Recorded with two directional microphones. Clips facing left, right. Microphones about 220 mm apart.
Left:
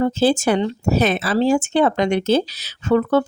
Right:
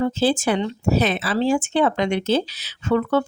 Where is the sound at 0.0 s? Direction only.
45° left (ahead or behind).